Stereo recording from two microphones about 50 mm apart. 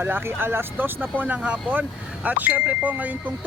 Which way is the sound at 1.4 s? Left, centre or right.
Right.